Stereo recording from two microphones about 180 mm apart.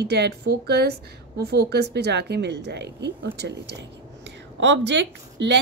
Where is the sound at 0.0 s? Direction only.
65° right (ahead or behind).